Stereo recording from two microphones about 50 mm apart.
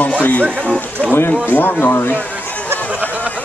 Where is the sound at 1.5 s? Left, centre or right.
Left.